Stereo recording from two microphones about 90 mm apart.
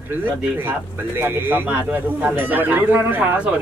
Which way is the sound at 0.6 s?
25° right (ahead or behind).